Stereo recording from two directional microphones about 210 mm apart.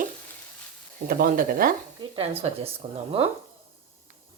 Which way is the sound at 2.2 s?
30° right (ahead or behind).